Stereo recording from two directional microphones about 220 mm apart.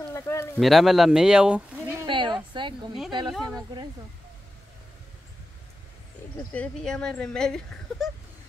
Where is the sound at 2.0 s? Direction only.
20° right (ahead or behind).